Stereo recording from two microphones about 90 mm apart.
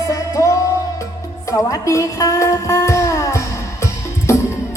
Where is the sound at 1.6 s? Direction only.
35° left (ahead or behind).